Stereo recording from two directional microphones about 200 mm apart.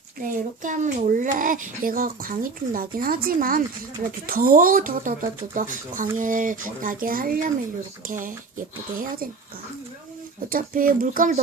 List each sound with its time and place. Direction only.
0.2 s speech: 40° right (ahead or behind)
10.5 s speech: 45° right (ahead or behind)